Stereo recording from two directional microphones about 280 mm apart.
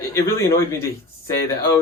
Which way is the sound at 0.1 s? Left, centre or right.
Centre.